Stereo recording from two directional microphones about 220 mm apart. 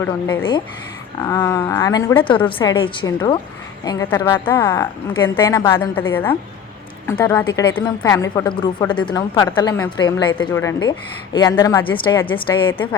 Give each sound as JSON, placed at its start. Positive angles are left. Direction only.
{"t": 0.0, "sound": "a woman's voice", "side_deg": 15}
{"t": 12.7, "sound": "a woman's voice", "side_deg": 10}